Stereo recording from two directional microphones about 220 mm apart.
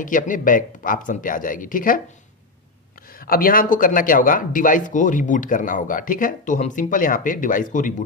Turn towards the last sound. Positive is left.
turn(degrees=35)  # may be behind; listen again after turning